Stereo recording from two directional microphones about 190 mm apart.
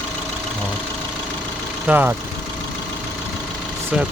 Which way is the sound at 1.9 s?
10° right (ahead or behind).